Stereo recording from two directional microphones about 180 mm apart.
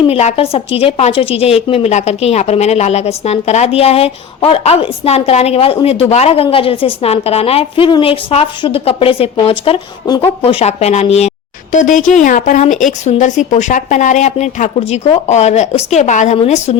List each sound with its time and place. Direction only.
0.1 s a woman's voice: 35° left (ahead or behind)